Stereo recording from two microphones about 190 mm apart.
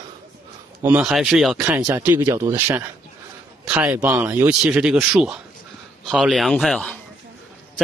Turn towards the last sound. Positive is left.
turn(degrees=0)  # may be behind; listen again after turning